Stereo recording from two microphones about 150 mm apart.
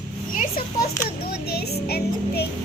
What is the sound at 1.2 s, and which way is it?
Speech, 90° left.